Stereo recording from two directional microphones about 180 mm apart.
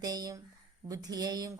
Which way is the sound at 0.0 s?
20° right (ahead or behind).